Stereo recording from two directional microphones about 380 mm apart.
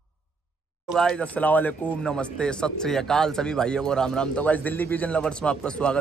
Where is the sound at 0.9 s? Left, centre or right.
Centre.